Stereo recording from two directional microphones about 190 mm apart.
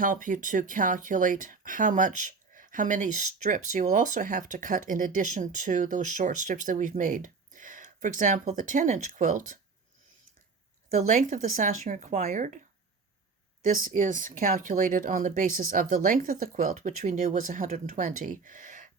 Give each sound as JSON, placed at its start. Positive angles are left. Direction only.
{"t": 0.0, "sound": "speech", "side_deg": -45}
{"t": 10.9, "sound": "speech", "side_deg": -40}
{"t": 13.9, "sound": "speech", "side_deg": -45}